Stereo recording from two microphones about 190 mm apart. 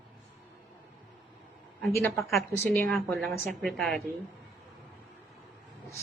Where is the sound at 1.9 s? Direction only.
15° left (ahead or behind).